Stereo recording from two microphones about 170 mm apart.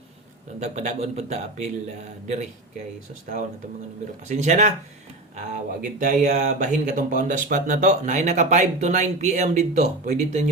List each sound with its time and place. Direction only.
0.6 s speech: 45° right (ahead or behind)
5.8 s speech: 50° right (ahead or behind)